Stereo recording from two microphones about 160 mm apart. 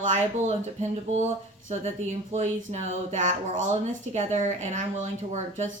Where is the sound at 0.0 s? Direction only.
45° right (ahead or behind).